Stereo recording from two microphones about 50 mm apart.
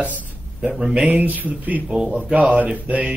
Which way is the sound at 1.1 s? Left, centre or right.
Right.